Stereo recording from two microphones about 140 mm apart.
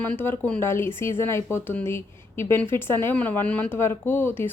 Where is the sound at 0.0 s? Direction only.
15° left (ahead or behind).